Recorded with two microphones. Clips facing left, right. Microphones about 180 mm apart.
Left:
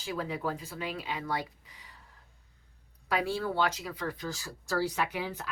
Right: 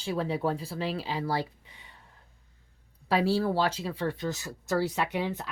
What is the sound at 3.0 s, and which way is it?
Speech, 30° right (ahead or behind).